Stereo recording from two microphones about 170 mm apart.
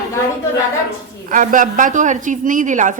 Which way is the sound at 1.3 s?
50° right (ahead or behind).